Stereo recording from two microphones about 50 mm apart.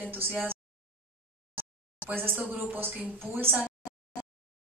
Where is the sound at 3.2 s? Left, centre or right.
Right.